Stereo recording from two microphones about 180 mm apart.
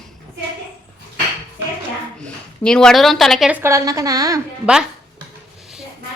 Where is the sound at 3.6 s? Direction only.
15° right (ahead or behind).